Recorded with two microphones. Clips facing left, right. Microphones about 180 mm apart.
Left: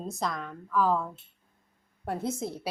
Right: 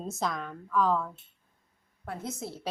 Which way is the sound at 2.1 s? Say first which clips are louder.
Left 6 dB; 35° left (ahead or behind).